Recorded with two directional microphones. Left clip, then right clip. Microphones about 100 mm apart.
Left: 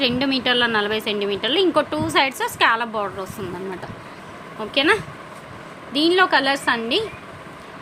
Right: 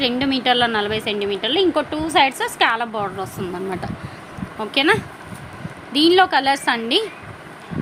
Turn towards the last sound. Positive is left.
turn(degrees=-30)  # may be behind; listen again after turning